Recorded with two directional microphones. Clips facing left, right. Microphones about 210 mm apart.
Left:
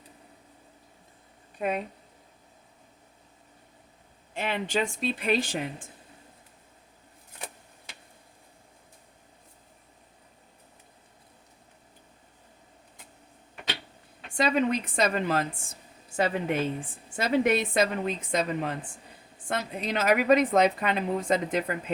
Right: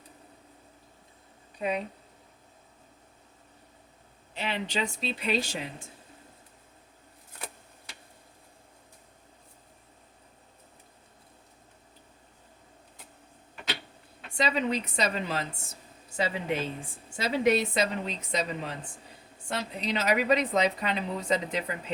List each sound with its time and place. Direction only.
1.5 s speech: 50° left (ahead or behind)
4.4 s a woman's voice: 50° left (ahead or behind)
14.3 s a woman's voice: 50° left (ahead or behind)